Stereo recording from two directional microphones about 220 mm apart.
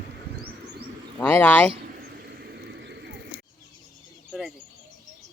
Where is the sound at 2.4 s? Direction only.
50° right (ahead or behind).